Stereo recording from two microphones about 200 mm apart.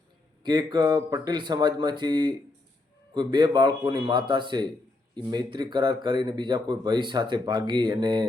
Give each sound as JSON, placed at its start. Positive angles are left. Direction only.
{"t": 0.4, "sound": "speech", "side_deg": -20}